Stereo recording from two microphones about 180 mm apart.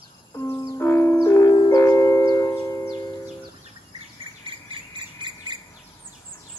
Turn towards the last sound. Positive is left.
turn(degrees=-25)  # may be behind; listen again after turning